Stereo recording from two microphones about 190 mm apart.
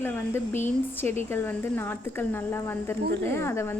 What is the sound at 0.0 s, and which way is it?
A woman's voice, 10° left (ahead or behind).